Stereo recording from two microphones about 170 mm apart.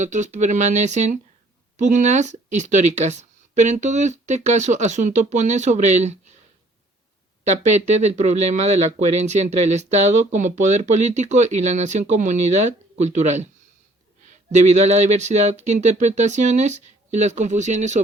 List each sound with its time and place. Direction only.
0.0 s speech: 45° right (ahead or behind)
7.4 s speech: 45° right (ahead or behind)